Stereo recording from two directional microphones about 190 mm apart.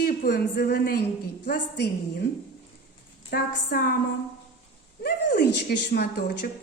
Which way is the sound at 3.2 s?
55° left (ahead or behind).